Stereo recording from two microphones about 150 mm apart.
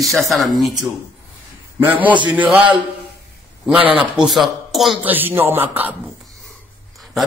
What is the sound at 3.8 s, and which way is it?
Speech, 35° right (ahead or behind).